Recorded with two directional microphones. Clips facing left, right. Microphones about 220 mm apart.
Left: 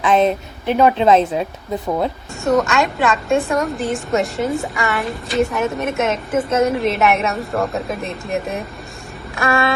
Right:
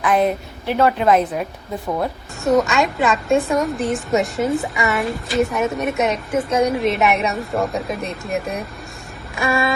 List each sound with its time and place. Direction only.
0.0 s a woman's voice: 25° left (ahead or behind)
2.4 s a woman's voice: centre (ahead or behind)